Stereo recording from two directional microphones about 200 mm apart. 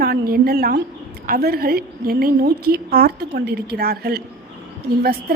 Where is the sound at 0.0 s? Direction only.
50° right (ahead or behind).